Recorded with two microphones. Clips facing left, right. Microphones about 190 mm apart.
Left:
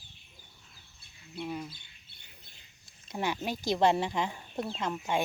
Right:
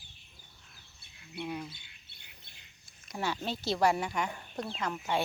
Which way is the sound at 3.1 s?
20° left (ahead or behind).